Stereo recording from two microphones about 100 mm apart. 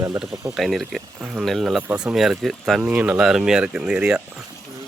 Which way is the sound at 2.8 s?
15° right (ahead or behind).